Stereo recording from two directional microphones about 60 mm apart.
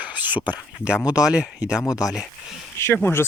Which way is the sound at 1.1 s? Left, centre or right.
Centre.